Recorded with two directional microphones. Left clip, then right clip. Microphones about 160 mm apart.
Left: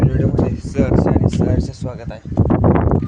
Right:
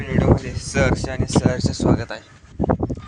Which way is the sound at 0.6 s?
10° left (ahead or behind).